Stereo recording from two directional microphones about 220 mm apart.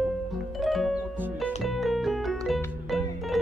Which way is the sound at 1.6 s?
Centre (ahead or behind).